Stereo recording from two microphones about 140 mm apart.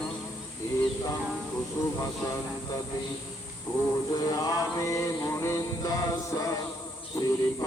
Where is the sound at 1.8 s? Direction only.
20° left (ahead or behind).